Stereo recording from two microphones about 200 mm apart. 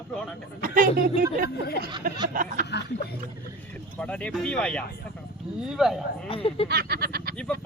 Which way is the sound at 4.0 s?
5° left (ahead or behind).